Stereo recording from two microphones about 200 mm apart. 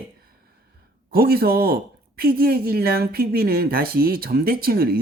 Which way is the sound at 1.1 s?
50° right (ahead or behind).